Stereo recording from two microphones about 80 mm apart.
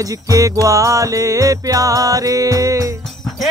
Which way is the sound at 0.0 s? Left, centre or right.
Right.